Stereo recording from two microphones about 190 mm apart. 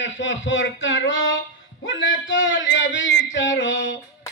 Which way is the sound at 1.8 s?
80° left.